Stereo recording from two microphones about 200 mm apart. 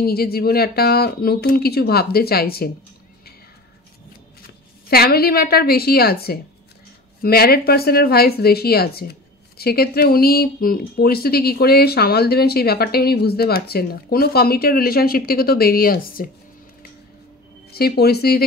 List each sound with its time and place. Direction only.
0.0 s speech: 50° left (ahead or behind)
4.4 s a woman's voice: 50° left (ahead or behind)
17.7 s speech: 50° left (ahead or behind)